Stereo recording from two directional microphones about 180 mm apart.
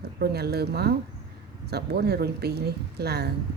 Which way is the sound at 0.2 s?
65° right (ahead or behind).